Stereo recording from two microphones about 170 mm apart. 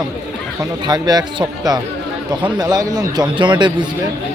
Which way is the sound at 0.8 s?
25° right (ahead or behind).